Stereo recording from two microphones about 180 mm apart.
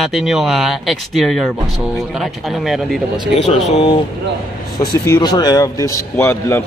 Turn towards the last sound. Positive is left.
turn(degrees=15)  # may be behind; listen again after turning